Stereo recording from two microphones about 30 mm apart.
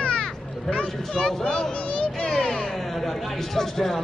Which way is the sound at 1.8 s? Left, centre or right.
Left.